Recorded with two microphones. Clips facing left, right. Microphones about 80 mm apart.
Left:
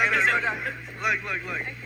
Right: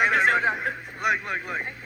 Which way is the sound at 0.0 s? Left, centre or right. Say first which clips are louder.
Right 2 dB; right.